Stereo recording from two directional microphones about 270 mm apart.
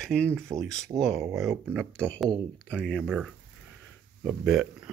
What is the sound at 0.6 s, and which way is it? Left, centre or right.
Speech, centre.